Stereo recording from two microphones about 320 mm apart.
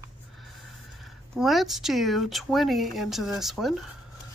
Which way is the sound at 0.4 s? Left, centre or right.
Centre.